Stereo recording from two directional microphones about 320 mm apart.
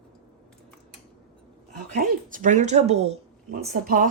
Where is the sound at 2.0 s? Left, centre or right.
Right.